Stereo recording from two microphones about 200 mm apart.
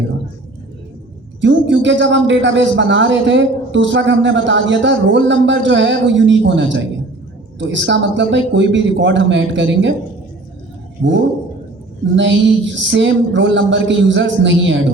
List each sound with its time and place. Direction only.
1.4 s a man's voice: 65° right (ahead or behind)
11.0 s a man's voice: 65° right (ahead or behind)